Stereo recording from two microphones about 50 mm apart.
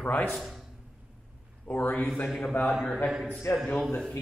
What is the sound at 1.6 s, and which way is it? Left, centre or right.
Speech, left.